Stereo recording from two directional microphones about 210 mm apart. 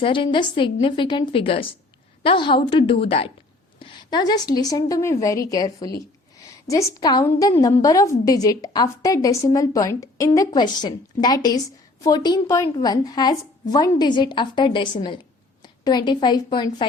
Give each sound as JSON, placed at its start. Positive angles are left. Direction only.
{"t": 0.0, "sound": "a woman's voice", "side_deg": 25}